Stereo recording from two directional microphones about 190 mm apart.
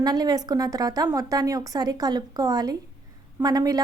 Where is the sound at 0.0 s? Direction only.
20° right (ahead or behind).